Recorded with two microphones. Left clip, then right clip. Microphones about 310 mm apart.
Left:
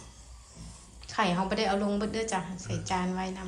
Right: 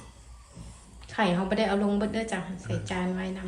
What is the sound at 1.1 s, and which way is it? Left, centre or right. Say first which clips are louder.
A woman's voice: right 1 dB; centre.